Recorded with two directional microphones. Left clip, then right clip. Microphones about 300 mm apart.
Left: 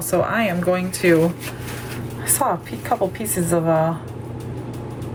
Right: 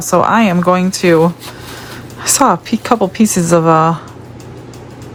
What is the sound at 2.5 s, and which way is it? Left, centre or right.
Speech, centre.